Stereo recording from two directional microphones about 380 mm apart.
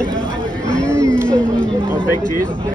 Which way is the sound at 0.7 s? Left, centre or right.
Centre.